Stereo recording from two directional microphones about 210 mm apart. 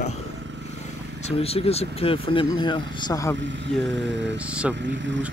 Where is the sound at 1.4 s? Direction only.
30° left (ahead or behind).